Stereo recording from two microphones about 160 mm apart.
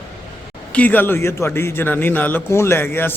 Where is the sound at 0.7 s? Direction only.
10° left (ahead or behind).